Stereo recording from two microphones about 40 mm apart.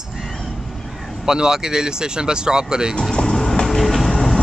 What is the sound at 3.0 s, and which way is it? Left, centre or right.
Vehicle, centre.